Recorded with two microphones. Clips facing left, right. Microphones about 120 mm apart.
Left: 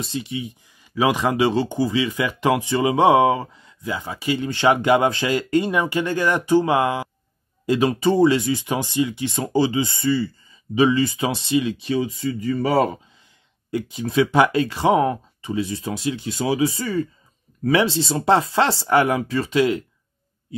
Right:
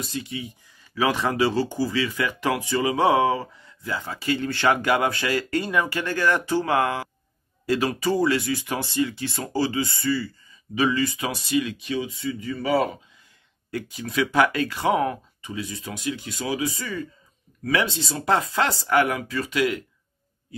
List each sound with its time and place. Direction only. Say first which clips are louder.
0.0 s speech: left 4 dB; 25° left (ahead or behind)
13.7 s speech: left 6 dB; 20° left (ahead or behind)